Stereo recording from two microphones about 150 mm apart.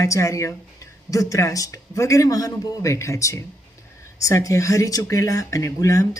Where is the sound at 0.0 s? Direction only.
20° left (ahead or behind).